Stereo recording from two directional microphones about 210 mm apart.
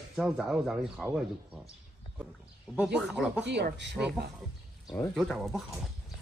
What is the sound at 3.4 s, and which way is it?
Speech, 55° right (ahead or behind).